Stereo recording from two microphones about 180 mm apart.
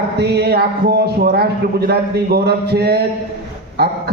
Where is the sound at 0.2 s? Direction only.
65° right (ahead or behind).